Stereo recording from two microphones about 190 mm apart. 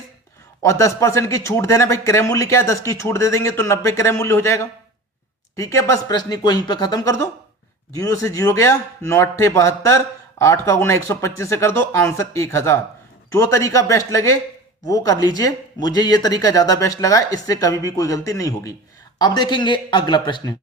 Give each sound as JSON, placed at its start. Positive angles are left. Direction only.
{"t": 0.6, "sound": "a man's voice", "side_deg": 15}